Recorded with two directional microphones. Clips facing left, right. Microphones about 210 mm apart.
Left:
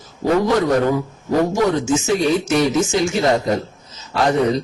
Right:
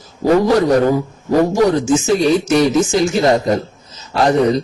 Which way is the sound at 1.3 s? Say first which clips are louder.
Right 4 dB; 35° right (ahead or behind).